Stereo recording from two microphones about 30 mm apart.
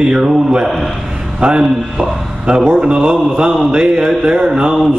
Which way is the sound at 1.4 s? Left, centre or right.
Right.